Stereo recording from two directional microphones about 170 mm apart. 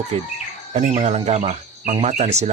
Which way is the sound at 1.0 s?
40° right (ahead or behind).